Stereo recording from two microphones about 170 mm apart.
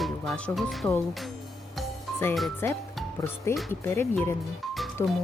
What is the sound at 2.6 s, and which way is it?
Speech, 15° left (ahead or behind).